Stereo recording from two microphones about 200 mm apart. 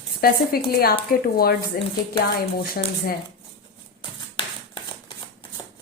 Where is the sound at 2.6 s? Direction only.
50° left (ahead or behind).